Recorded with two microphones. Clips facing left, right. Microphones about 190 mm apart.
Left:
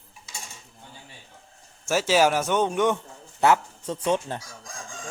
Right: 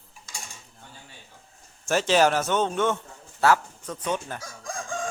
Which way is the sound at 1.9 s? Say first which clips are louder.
Even; 5° left (ahead or behind).